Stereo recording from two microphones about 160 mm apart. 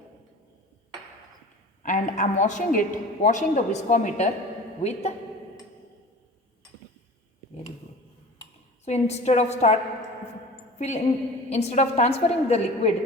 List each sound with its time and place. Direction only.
1.8 s a woman's voice: 50° left (ahead or behind)
8.8 s a woman's voice: 45° left (ahead or behind)
10.8 s a woman's voice: 45° left (ahead or behind)